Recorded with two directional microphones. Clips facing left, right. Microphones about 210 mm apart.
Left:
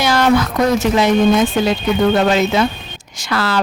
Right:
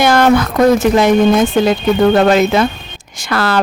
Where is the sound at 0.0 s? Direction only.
55° right (ahead or behind).